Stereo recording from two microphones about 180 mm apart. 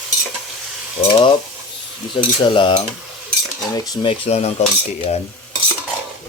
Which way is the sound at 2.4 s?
25° left (ahead or behind).